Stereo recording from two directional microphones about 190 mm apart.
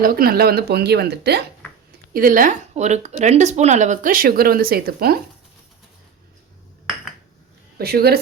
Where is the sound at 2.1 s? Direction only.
45° right (ahead or behind).